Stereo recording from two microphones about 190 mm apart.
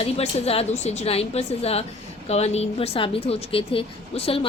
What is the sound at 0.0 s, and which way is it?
A woman's voice, 35° left (ahead or behind).